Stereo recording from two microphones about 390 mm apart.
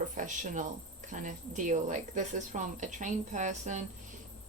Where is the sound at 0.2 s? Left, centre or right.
Centre.